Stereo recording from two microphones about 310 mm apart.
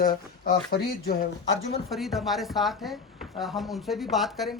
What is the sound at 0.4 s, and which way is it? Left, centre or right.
Speech, left.